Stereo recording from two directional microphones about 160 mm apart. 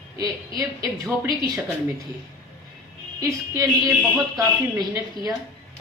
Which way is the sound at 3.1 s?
20° right (ahead or behind).